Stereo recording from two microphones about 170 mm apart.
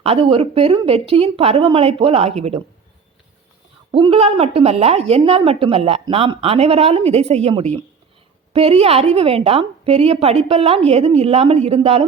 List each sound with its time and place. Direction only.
0.0 s a woman's voice: 35° right (ahead or behind)
3.9 s a woman's voice: 30° right (ahead or behind)